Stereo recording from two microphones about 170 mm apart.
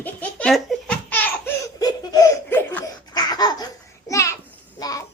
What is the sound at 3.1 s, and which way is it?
Laughter, 25° left (ahead or behind).